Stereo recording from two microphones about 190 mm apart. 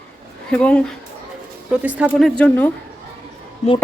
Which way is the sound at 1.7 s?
5° right (ahead or behind).